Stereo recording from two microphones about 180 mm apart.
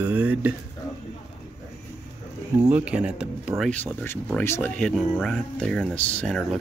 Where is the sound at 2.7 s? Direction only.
5° right (ahead or behind).